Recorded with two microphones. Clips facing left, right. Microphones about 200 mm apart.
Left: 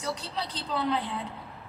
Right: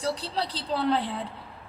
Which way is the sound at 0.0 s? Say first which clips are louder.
Right 4 dB; 35° right (ahead or behind).